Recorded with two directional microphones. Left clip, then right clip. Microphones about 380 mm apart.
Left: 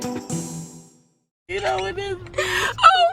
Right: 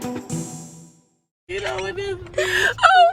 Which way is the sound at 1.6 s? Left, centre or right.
Centre.